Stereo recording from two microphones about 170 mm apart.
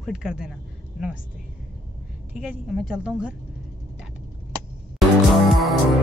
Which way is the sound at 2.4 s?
Centre (ahead or behind).